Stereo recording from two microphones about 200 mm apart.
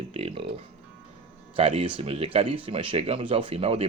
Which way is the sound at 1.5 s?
30° right (ahead or behind).